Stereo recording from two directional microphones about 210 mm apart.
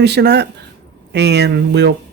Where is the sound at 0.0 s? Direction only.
55° right (ahead or behind).